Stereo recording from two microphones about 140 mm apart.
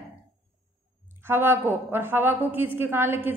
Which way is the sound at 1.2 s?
15° right (ahead or behind).